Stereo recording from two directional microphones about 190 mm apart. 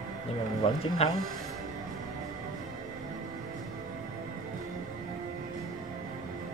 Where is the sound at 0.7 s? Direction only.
30° left (ahead or behind).